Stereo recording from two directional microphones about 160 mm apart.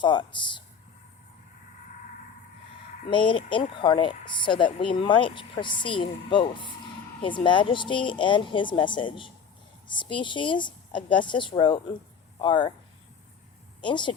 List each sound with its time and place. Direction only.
0.0 s speech: 30° left (ahead or behind)
3.1 s speech: 30° left (ahead or behind)
13.8 s speech: 30° left (ahead or behind)